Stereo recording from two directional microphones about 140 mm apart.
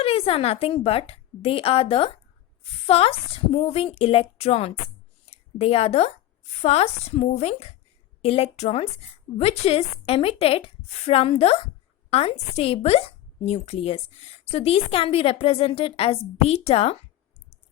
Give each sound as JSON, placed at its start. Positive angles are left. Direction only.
{"t": 0.0, "sound": "speech", "side_deg": 40}